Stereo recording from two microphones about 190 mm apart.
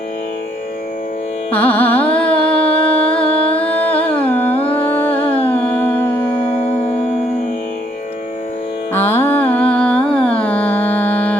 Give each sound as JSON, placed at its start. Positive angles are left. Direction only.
{"t": 1.5, "sound": "carnatic music", "side_deg": 10}
{"t": 3.5, "sound": "music", "side_deg": 10}
{"t": 5.2, "sound": "humming", "side_deg": 30}
{"t": 5.5, "sound": "humming", "side_deg": 5}
{"t": 6.4, "sound": "music", "side_deg": 30}
{"t": 8.9, "sound": "music", "side_deg": 10}